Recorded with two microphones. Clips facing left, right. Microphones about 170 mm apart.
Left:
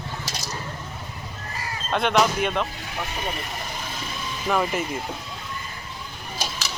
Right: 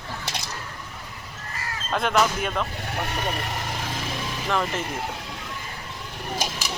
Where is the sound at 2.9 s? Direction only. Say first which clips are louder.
Right 2 dB; 60° right (ahead or behind).